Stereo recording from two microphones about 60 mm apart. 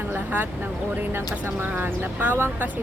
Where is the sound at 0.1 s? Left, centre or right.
Right.